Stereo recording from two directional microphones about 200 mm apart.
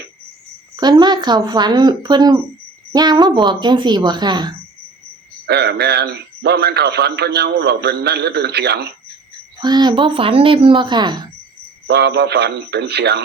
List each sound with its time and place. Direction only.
0.8 s speech: 20° right (ahead or behind)
5.5 s a man's voice: 55° right (ahead or behind)
9.6 s speech: 20° right (ahead or behind)
11.9 s a man's voice: 55° right (ahead or behind)